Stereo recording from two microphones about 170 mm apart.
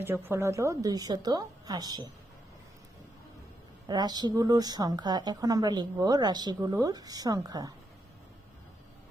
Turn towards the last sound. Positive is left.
turn(degrees=-20)  # may be behind; listen again after turning